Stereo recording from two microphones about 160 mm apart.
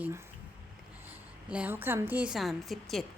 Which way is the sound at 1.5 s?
10° right (ahead or behind).